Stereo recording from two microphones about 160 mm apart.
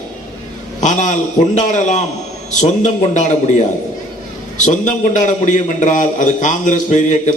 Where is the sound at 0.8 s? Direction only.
50° left (ahead or behind).